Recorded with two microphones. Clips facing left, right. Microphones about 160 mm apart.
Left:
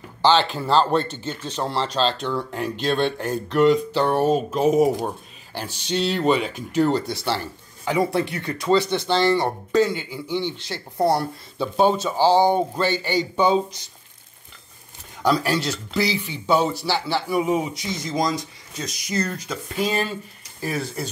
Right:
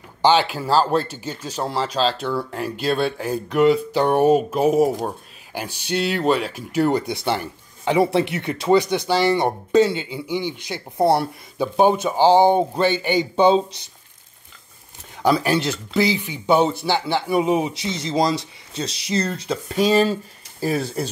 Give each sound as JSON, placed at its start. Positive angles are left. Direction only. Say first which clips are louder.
{"t": 0.2, "sound": "speech", "louder": "right 1 dB", "side_deg": -10}
{"t": 15.2, "sound": "a man's voice", "louder": "right 2 dB", "side_deg": -20}